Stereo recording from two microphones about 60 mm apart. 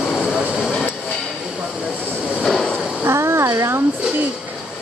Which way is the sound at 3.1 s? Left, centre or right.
Right.